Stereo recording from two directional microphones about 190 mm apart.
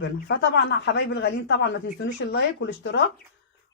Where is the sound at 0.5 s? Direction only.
65° left (ahead or behind).